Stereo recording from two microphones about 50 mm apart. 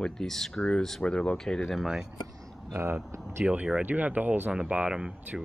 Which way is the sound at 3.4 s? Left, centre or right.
Right.